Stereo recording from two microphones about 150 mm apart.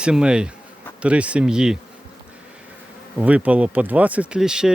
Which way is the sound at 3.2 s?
10° right (ahead or behind).